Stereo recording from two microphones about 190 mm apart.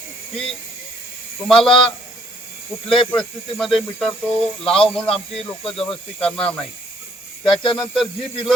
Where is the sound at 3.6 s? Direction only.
Centre (ahead or behind).